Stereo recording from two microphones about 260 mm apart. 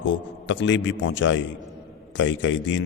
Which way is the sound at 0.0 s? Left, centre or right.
Left.